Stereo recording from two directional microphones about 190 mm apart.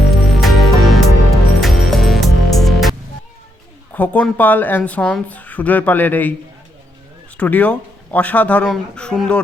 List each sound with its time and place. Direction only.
0.0 s music: centre (ahead or behind)
3.9 s speech: 10° left (ahead or behind)
7.3 s speech: 5° left (ahead or behind)